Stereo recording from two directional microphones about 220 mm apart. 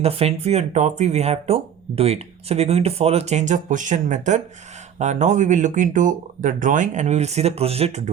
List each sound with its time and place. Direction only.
0.0 s speech: 25° right (ahead or behind)